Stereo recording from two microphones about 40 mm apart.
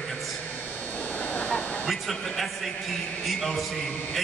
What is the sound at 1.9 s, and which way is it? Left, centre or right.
A man's voice, centre.